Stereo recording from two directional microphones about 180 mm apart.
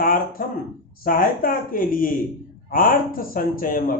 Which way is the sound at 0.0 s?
50° left (ahead or behind).